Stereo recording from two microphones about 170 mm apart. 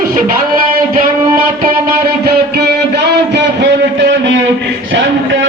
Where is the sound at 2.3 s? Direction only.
70° right (ahead or behind); by 4.1 s 90° right.